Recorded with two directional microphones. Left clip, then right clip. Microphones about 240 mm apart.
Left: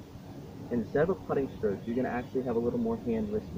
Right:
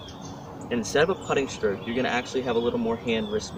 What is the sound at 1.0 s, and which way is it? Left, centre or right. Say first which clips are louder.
Speech: right 6 dB; centre.